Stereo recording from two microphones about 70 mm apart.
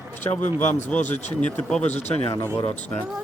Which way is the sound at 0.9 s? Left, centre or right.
Centre.